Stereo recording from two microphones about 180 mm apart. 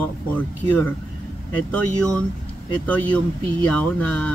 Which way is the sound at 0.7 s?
10° left (ahead or behind).